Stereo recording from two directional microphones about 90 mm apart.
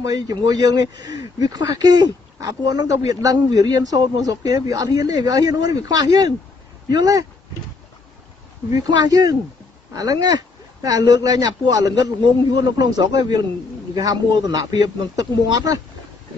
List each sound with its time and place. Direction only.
0.0 s a man's voice: 45° right (ahead or behind)
8.8 s a man's voice: 50° right (ahead or behind)